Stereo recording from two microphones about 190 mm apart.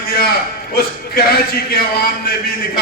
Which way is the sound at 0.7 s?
55° left (ahead or behind).